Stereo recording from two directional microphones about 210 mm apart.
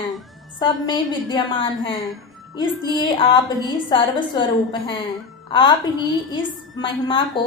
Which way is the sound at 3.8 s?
20° left (ahead or behind).